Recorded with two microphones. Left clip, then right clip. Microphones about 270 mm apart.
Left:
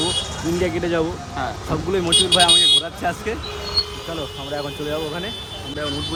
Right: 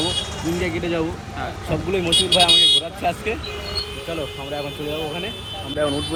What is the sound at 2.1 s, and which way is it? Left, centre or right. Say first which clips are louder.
Speech: left 1 dB; left.